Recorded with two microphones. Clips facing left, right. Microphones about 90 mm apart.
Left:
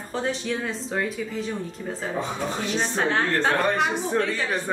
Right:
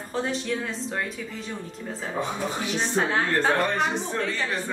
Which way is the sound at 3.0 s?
Centre (ahead or behind).